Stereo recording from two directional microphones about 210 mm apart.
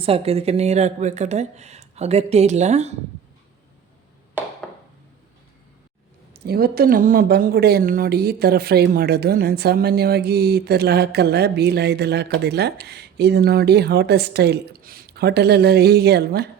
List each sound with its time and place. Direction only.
0.0 s speech: 30° right (ahead or behind)
6.3 s speech: 50° right (ahead or behind)